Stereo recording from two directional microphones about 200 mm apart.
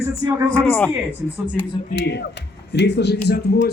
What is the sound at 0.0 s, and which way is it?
Speech, 15° right (ahead or behind).